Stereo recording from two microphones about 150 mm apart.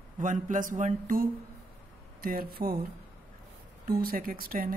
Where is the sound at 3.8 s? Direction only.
80° right.